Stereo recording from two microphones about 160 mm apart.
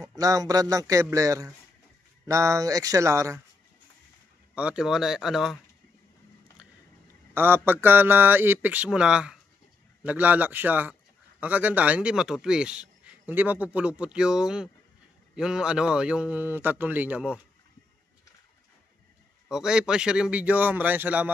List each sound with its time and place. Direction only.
0.2 s a man's voice: 20° right (ahead or behind)
4.6 s speech: 5° right (ahead or behind)
7.3 s a man's voice: 15° right (ahead or behind)
19.5 s a man's voice: 5° right (ahead or behind)